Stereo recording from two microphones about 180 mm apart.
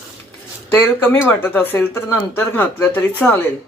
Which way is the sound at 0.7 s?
10° left (ahead or behind).